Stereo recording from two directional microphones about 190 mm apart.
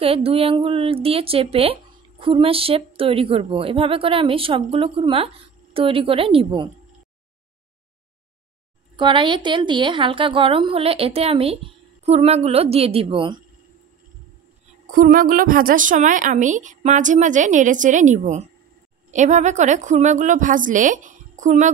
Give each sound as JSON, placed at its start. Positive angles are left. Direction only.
{"t": 0.0, "sound": "a woman's voice", "side_deg": -30}
{"t": 8.9, "sound": "a woman's voice", "side_deg": -25}
{"t": 14.9, "sound": "a woman's voice", "side_deg": -45}